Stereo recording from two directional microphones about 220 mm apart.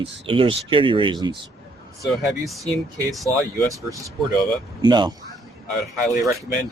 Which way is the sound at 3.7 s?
15° right (ahead or behind).